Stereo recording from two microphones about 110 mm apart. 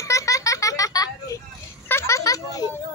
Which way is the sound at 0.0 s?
30° left (ahead or behind).